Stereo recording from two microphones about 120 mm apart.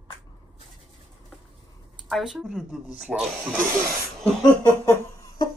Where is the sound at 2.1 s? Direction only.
Centre (ahead or behind).